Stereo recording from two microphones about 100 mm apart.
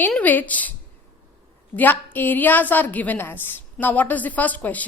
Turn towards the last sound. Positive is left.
turn(degrees=15)  # may be behind; listen again after turning